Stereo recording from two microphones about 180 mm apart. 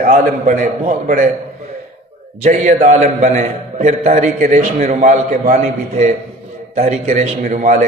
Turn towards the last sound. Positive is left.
turn(degrees=-45)  # may be behind; listen again after turning